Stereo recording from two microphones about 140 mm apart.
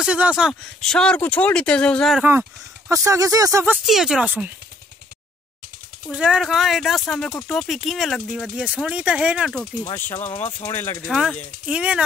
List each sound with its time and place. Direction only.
0.0 s speech: 5° right (ahead or behind)
2.9 s speech: 25° right (ahead or behind)
3.7 s speech: centre (ahead or behind)
6.0 s speech: 5° right (ahead or behind)
10.2 s speech: 50° left (ahead or behind)
10.6 s speech: 20° left (ahead or behind)
11.1 s speech: 5° right (ahead or behind)